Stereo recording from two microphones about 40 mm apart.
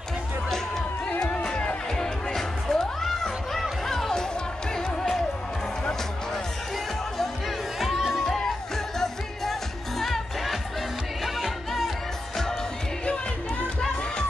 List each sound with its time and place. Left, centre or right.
1.2 s music: centre
8.0 s music: centre
9.0 s music: centre